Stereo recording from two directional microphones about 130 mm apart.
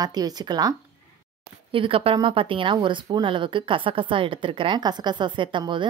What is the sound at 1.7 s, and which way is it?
Speech, 45° right (ahead or behind).